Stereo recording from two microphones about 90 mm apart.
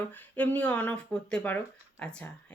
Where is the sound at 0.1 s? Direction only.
20° left (ahead or behind).